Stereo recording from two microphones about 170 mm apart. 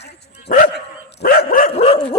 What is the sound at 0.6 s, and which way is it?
Dog, 70° left (ahead or behind).